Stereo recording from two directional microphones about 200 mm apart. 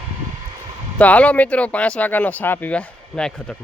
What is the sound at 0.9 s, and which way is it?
Speech, 5° left (ahead or behind).